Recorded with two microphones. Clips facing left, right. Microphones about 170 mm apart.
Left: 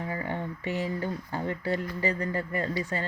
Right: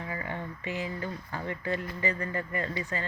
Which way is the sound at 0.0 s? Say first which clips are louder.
Left 4 dB; 35° left (ahead or behind).